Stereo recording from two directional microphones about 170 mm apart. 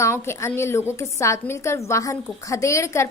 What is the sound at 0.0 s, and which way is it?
A woman's voice, 15° left (ahead or behind).